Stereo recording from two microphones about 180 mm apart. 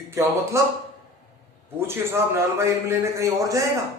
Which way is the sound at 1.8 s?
15° right (ahead or behind).